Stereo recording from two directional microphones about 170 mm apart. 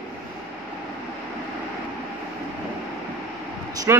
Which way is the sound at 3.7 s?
20° right (ahead or behind).